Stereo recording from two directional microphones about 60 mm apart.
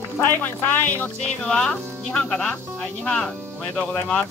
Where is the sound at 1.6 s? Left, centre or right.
Centre.